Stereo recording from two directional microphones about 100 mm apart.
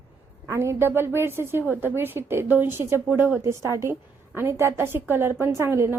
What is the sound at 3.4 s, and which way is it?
A woman's voice, 30° right (ahead or behind).